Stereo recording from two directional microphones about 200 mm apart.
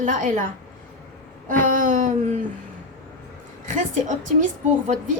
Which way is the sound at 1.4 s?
40° right (ahead or behind).